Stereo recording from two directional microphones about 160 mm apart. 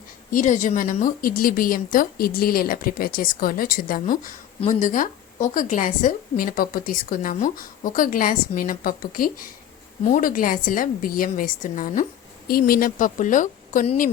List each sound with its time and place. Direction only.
0.3 s a woman's voice: 55° left (ahead or behind)